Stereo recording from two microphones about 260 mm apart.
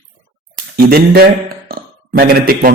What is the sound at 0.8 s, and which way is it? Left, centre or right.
A man's voice, right.